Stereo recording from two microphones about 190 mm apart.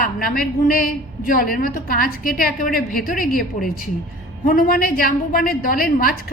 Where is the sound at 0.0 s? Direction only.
50° left (ahead or behind).